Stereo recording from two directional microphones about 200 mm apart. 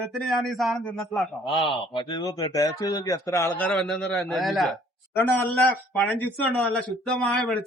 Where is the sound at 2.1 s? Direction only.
20° left (ahead or behind).